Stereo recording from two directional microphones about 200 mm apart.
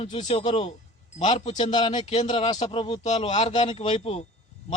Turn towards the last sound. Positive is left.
turn(degrees=30)  # may be behind; listen again after turning